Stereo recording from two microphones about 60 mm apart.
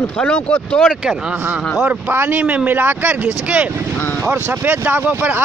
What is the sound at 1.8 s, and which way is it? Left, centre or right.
Speech, right.